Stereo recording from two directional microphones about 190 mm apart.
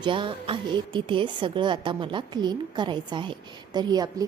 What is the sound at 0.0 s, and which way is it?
A woman's voice, 25° right (ahead or behind).